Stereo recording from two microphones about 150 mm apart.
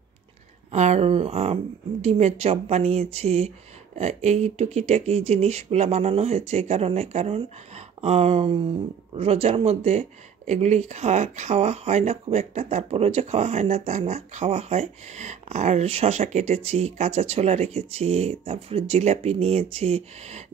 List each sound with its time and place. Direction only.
0.7 s speech: 45° right (ahead or behind)